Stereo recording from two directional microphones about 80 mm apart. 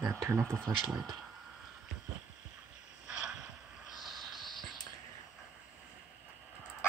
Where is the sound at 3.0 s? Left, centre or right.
Centre.